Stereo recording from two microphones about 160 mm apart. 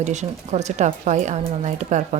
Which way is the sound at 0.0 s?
45° right (ahead or behind).